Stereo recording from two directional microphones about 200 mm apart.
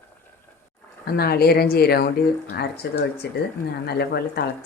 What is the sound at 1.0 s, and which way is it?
Speech, 50° left (ahead or behind).